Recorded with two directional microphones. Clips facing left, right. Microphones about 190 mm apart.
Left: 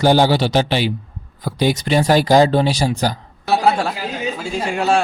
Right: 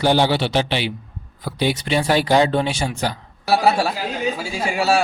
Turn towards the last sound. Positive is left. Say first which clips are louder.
# left 1 dB
turn(degrees=-5)  # may be behind; listen again after turning